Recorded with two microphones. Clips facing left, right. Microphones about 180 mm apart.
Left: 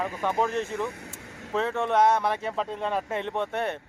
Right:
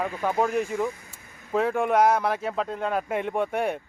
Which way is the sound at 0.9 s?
70° left (ahead or behind).